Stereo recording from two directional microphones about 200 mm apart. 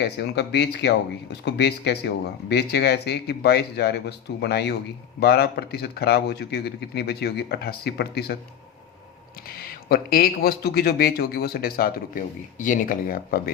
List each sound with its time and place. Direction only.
0.0 s speech: 55° left (ahead or behind)
9.5 s speech: 50° left (ahead or behind)